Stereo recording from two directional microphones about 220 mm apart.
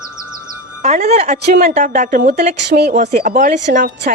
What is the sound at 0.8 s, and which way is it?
Speech, 30° right (ahead or behind).